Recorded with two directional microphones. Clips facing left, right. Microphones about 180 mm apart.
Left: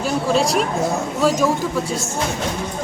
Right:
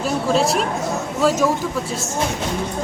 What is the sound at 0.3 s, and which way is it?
Speech, centre (ahead or behind).